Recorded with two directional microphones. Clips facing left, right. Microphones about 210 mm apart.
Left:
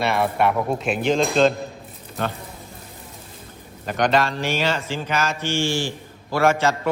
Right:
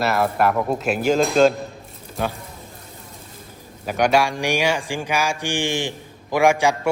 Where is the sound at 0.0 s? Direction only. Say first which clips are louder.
Right 1 dB; centre (ahead or behind).